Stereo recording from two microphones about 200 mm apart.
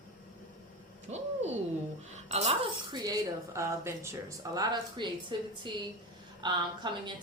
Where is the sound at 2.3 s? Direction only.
35° right (ahead or behind).